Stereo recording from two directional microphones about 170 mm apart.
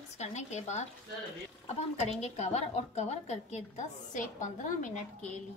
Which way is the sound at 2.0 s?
40° left (ahead or behind).